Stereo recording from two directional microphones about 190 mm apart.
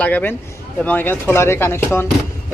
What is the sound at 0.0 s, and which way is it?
Speech, 10° left (ahead or behind).